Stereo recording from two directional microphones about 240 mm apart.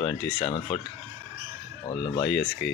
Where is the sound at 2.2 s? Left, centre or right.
Centre.